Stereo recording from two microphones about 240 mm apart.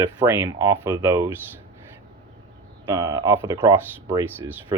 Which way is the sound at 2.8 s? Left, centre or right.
Centre.